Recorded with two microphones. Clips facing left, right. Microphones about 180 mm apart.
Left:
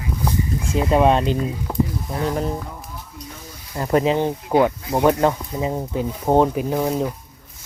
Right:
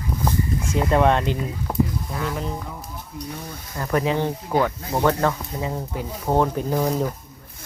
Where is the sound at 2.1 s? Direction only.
35° left (ahead or behind).